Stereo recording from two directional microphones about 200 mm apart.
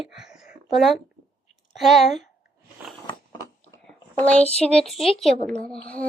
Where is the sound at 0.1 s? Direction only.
Centre (ahead or behind).